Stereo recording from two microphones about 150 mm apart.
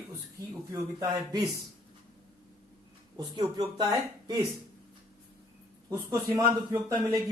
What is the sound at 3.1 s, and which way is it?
Speech, 25° right (ahead or behind).